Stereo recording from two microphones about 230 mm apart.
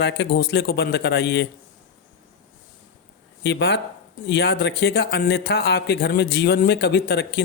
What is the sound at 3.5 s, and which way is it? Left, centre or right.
Speech, left.